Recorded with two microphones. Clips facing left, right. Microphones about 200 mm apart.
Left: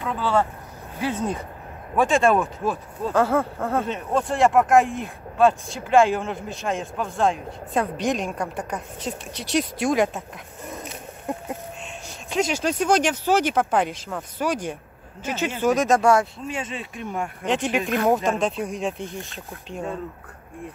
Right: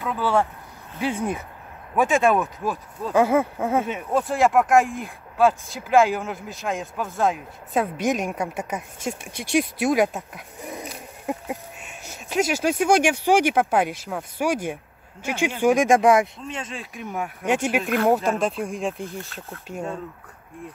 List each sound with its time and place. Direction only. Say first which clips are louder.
0.0 s speech: even; 10° right (ahead or behind)
16.4 s speech: left 3 dB; 5° left (ahead or behind)